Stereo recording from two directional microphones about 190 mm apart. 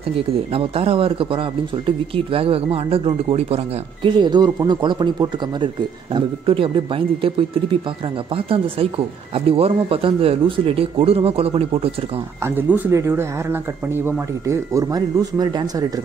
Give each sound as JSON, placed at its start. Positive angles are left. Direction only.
{"t": 0.3, "sound": "speech", "side_deg": -30}
{"t": 12.4, "sound": "speech", "side_deg": -10}